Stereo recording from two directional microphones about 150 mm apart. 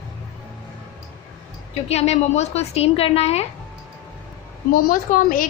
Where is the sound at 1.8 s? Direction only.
45° left (ahead or behind).